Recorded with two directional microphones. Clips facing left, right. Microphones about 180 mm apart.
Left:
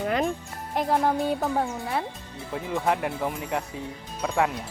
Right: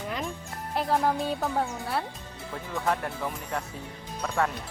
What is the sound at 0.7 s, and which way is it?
Speech, 15° left (ahead or behind).